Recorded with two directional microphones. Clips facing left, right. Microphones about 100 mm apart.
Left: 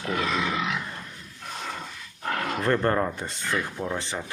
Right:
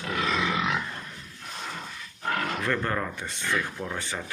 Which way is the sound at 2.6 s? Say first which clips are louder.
Left 5 dB; 35° left (ahead or behind).